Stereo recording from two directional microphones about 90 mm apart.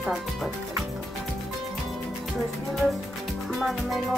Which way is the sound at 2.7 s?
Centre (ahead or behind).